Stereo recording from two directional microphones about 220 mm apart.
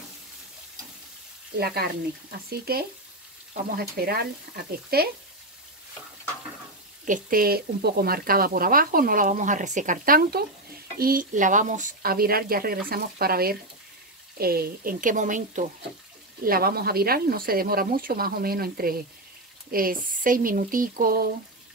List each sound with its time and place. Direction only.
1.6 s speech: 45° right (ahead or behind)
7.1 s speech: 40° right (ahead or behind)